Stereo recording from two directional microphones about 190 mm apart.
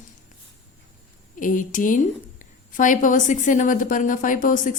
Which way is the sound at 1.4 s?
45° left (ahead or behind).